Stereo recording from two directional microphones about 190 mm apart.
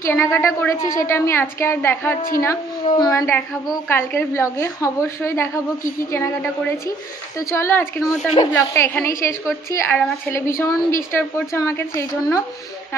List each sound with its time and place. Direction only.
0.0 s a woman's voice: 15° left (ahead or behind)